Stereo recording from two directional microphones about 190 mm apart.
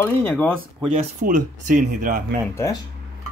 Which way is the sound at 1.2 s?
45° right (ahead or behind).